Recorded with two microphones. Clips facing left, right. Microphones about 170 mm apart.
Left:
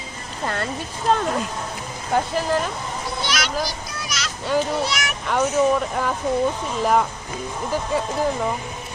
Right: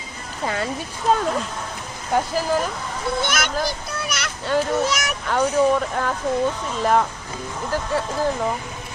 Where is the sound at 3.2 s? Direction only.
50° right (ahead or behind).